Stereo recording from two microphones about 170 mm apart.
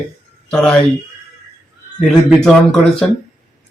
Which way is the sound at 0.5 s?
5° left (ahead or behind).